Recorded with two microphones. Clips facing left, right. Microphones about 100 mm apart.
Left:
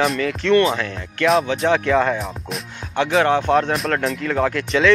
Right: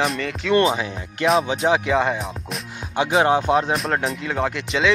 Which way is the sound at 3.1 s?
15° right (ahead or behind).